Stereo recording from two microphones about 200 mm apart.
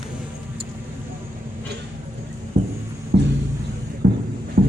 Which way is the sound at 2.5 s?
40° right (ahead or behind).